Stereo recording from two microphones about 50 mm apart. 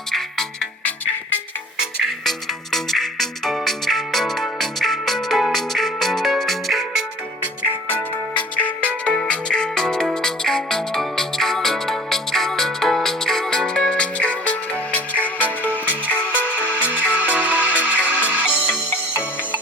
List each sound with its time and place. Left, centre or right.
0.1 s music: centre
2.2 s music: centre
8.4 s music: left
16.6 s music: right